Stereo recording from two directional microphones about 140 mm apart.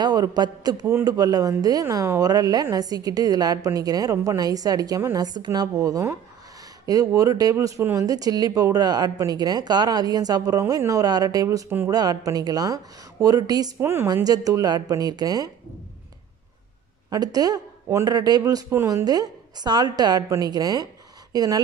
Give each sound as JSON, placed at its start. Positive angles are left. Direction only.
{"t": 0.0, "sound": "a man's voice", "side_deg": -30}
{"t": 13.7, "sound": "a woman's voice", "side_deg": -15}
{"t": 17.1, "sound": "a woman's voice", "side_deg": -25}